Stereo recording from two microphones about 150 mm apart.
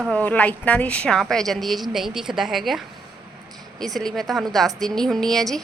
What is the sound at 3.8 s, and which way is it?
A woman's voice, centre (ahead or behind).